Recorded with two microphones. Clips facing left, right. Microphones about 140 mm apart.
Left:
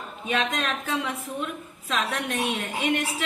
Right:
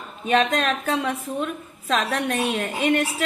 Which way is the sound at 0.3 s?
40° right (ahead or behind).